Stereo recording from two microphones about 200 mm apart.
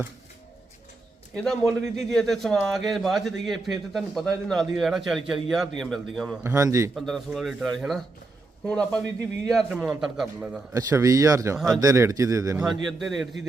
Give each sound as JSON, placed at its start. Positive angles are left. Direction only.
{"t": 1.5, "sound": "speech", "side_deg": 0}
{"t": 6.4, "sound": "a man's voice", "side_deg": -15}
{"t": 6.9, "sound": "speech", "side_deg": 0}
{"t": 10.8, "sound": "a man's voice", "side_deg": -15}
{"t": 11.5, "sound": "speech", "side_deg": 0}
{"t": 11.8, "sound": "a man's voice", "side_deg": -15}
{"t": 12.6, "sound": "speech", "side_deg": 0}